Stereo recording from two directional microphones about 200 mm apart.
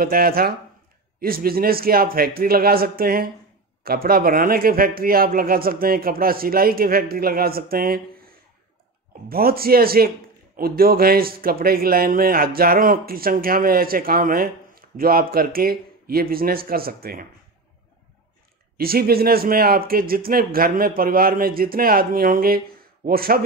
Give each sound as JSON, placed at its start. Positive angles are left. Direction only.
{"t": 0.0, "sound": "a man's voice", "side_deg": -50}
{"t": 18.8, "sound": "a man's voice", "side_deg": -50}